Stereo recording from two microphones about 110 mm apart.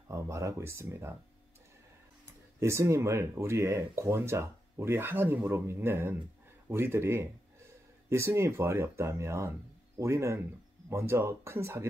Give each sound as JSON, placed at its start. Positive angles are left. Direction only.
{"t": 0.1, "sound": "speech", "side_deg": -25}
{"t": 2.6, "sound": "speech", "side_deg": -25}